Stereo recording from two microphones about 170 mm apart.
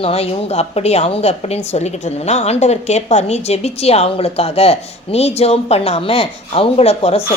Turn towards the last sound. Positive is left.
turn(degrees=35)  # may be behind; listen again after turning